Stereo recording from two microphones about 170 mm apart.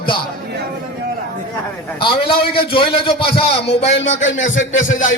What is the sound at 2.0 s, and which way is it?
A man's voice, 30° left (ahead or behind).